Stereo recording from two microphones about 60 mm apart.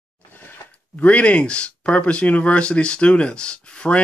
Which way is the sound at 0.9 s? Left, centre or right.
Left.